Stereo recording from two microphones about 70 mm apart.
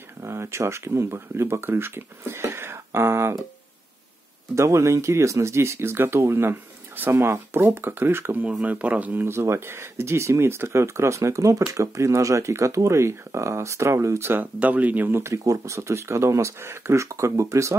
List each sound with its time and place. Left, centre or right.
0.2 s speech: right
4.6 s speech: right
9.3 s speech: right